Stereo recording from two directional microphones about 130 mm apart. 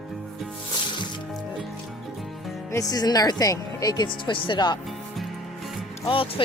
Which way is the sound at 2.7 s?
30° left (ahead or behind).